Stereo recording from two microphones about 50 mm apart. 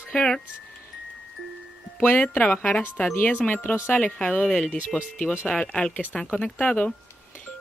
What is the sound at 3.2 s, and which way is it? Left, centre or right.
Speech, left.